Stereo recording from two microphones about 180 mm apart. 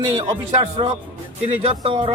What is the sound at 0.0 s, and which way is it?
Speech, 25° right (ahead or behind).